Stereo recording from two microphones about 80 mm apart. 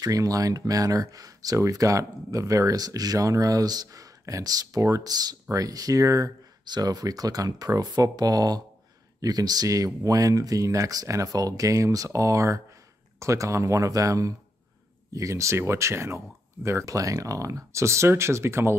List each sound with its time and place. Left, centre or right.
0.0 s speech: right
6.6 s speech: right